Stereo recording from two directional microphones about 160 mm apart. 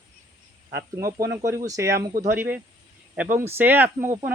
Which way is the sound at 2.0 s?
70° right (ahead or behind).